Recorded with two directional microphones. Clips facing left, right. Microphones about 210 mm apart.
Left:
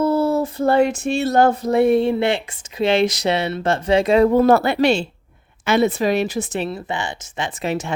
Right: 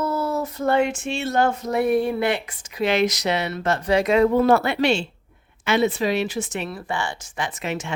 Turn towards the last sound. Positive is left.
turn(degrees=35)  # may be behind; listen again after turning